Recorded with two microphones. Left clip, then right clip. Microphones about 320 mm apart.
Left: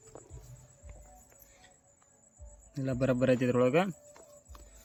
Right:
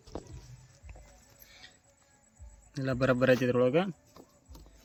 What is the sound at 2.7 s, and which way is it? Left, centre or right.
A man's voice, centre.